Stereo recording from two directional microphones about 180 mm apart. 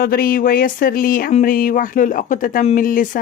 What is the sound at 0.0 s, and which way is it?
Speech, 55° left (ahead or behind).